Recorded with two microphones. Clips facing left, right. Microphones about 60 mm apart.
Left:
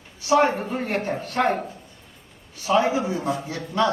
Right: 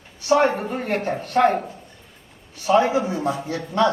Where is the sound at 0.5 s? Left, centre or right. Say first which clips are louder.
Right 1 dB; right.